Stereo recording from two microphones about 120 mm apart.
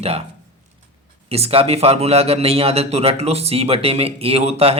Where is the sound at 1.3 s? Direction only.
55° right (ahead or behind).